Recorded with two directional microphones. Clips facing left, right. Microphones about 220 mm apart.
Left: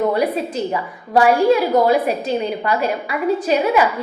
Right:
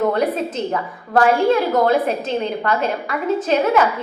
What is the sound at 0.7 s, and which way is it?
A woman's voice, 10° left (ahead or behind).